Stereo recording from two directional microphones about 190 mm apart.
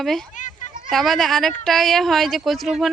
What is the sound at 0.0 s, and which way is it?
Speech, centre (ahead or behind).